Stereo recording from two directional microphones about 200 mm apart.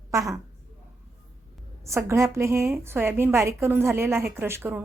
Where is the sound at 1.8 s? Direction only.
15° right (ahead or behind).